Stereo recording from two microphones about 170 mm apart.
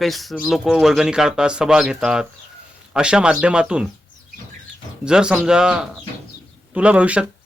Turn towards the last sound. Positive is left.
turn(degrees=-10)  # may be behind; listen again after turning